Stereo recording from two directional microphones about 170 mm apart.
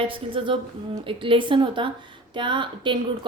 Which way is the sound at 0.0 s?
30° right (ahead or behind).